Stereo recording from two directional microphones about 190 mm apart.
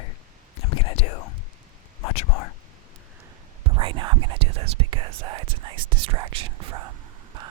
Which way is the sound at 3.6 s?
25° right (ahead or behind).